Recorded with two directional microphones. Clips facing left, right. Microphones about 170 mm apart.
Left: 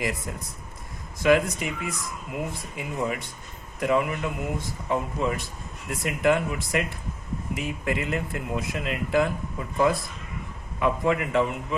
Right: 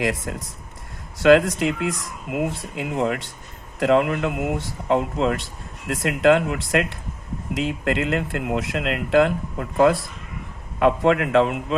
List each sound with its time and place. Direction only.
0.0 s speech: 75° right (ahead or behind)